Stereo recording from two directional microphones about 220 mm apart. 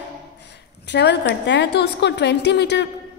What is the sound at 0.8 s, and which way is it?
A woman's voice, 50° left (ahead or behind).